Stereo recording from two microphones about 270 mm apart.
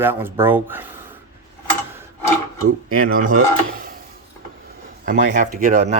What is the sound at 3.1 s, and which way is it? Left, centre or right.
Speech, right.